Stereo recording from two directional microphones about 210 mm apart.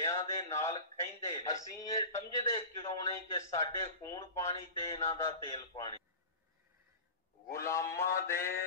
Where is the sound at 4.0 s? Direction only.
15° left (ahead or behind).